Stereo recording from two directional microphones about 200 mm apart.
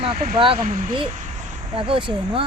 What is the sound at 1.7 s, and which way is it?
Speech, 25° right (ahead or behind).